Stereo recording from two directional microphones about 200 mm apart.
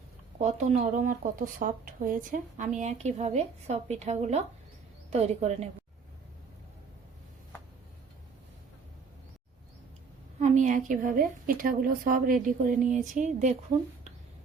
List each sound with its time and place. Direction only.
0.3 s speech: 35° right (ahead or behind)
10.4 s speech: 35° right (ahead or behind)